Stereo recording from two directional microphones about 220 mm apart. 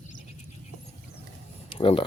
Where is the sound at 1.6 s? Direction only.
25° left (ahead or behind).